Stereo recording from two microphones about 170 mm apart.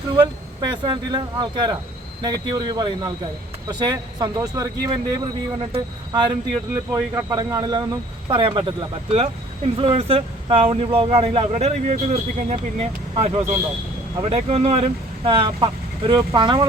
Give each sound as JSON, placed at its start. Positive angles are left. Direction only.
{"t": 0.6, "sound": "speech", "side_deg": -25}